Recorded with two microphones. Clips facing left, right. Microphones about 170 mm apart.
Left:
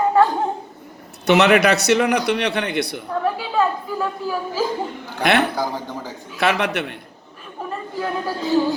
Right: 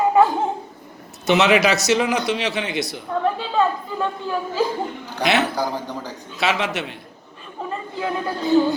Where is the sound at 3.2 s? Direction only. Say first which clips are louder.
Even; 5° left (ahead or behind).